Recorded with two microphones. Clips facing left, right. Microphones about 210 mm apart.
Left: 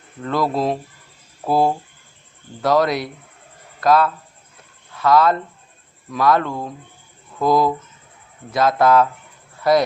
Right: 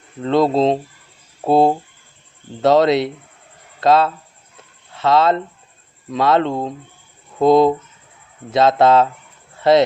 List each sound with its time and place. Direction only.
0.2 s speech: 25° right (ahead or behind)
9.6 s dog: 25° right (ahead or behind)